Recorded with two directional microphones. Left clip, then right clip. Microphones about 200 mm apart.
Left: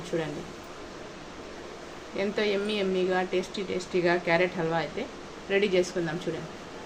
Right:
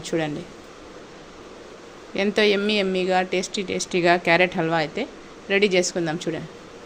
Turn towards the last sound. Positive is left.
turn(degrees=-50)  # may be behind; listen again after turning